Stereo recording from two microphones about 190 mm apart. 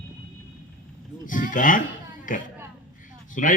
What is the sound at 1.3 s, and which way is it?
Speech, 45° left (ahead or behind).